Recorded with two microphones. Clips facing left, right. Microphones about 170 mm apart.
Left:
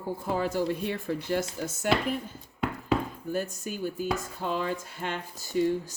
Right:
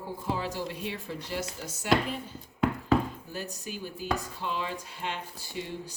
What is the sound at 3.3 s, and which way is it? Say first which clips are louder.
Speech: left 9 dB; 50° left (ahead or behind).